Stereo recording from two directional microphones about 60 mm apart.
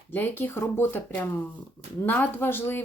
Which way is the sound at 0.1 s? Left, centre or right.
Left.